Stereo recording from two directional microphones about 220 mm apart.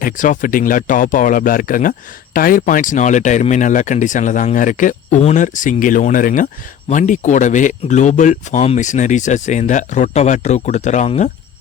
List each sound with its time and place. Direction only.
0.0 s speech: 35° left (ahead or behind)